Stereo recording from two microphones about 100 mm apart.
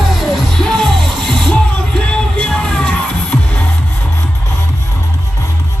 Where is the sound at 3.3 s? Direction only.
25° left (ahead or behind).